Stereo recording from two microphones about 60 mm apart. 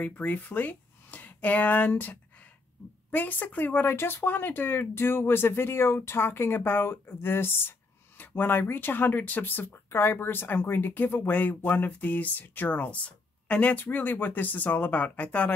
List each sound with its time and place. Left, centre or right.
0.0 s speech: left
9.7 s speech: left